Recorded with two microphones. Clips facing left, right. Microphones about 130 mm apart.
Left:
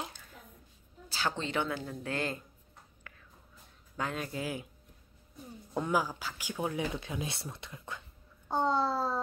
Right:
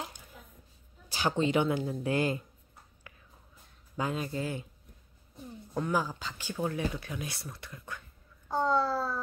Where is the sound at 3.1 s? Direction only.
10° right (ahead or behind).